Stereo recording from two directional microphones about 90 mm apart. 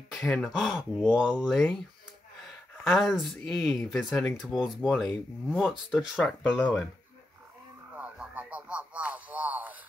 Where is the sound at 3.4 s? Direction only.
Centre (ahead or behind).